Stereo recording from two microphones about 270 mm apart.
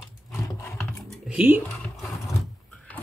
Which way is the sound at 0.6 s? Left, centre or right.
Centre.